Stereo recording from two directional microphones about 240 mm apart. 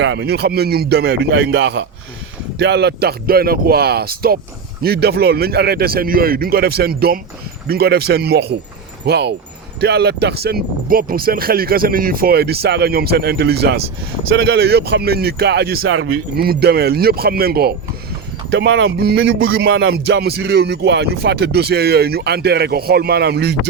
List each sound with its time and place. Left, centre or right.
0.0 s speech: right
15.8 s speech: right